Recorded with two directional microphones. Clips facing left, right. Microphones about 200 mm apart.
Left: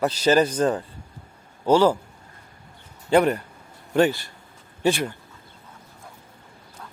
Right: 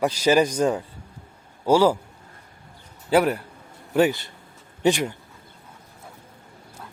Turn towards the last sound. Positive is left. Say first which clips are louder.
# right 1 dB
turn(degrees=-15)  # may be behind; listen again after turning